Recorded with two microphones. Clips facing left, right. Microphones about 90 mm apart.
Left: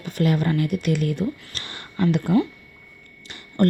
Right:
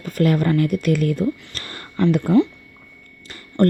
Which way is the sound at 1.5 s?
40° right (ahead or behind).